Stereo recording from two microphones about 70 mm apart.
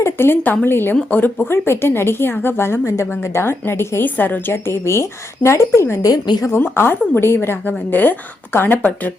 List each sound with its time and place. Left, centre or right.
0.0 s speech: left
6.0 s a woman's voice: left
6.6 s speech: left